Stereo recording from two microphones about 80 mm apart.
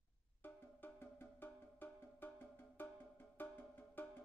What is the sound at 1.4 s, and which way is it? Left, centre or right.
Music, left.